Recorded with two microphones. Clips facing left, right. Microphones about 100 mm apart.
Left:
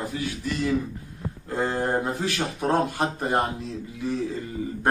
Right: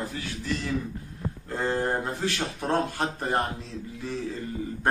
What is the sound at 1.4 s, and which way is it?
Speech, 15° left (ahead or behind).